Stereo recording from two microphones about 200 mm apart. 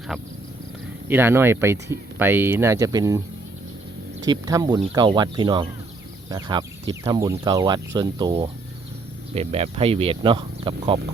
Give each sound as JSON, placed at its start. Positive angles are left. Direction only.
{"t": 0.1, "sound": "a sound", "side_deg": 0}
{"t": 1.0, "sound": "speech", "side_deg": -10}
{"t": 4.2, "sound": "speech", "side_deg": -20}